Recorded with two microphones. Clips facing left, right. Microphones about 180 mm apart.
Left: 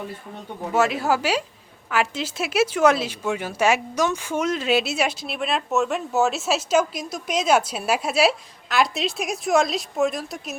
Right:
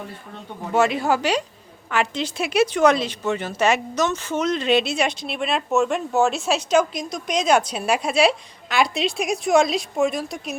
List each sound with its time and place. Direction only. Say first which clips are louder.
0.7 s speech: right 1 dB; 5° left (ahead or behind)